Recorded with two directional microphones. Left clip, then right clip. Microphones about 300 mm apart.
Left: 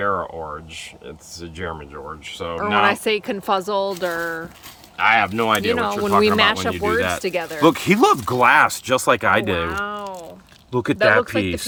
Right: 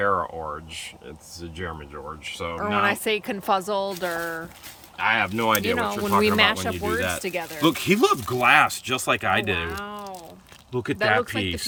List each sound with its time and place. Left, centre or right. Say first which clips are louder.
1.6 s speech: left 4 dB; centre
10.7 s speech: left 6 dB; centre